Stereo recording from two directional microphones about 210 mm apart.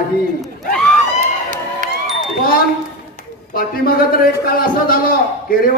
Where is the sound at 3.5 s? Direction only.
45° left (ahead or behind).